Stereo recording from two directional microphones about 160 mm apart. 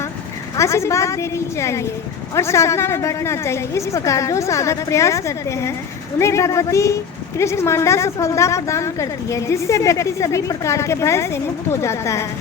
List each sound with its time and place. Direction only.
0.5 s a woman's voice: 20° left (ahead or behind)